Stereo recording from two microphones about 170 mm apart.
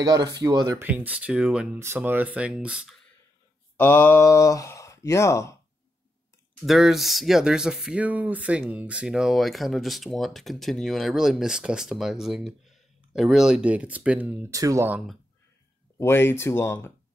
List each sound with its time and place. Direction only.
0.0 s speech: 20° right (ahead or behind)
0.8 s speech: 10° right (ahead or behind)
3.7 s speech: 15° left (ahead or behind)
6.6 s speech: centre (ahead or behind)
14.5 s speech: 20° right (ahead or behind)
16.0 s speech: 15° left (ahead or behind)